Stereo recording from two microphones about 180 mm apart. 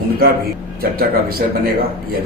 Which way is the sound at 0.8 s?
55° right (ahead or behind).